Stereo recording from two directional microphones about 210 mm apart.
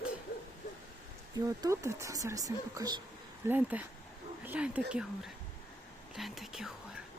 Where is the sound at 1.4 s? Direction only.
15° right (ahead or behind).